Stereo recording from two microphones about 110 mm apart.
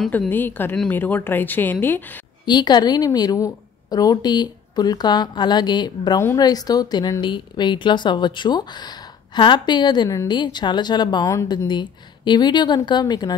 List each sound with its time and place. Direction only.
0.3 s speech: 20° left (ahead or behind)
2.4 s a woman's voice: 40° left (ahead or behind)